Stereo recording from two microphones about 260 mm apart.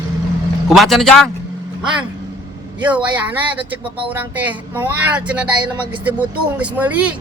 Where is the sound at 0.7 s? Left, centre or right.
Centre.